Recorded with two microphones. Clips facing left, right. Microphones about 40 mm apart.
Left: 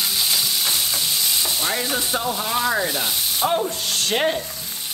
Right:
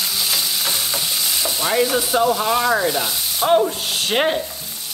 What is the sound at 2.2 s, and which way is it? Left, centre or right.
Speech, right.